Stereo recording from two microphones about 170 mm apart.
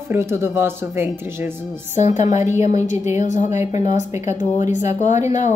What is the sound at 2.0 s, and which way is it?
Speech, 45° left (ahead or behind).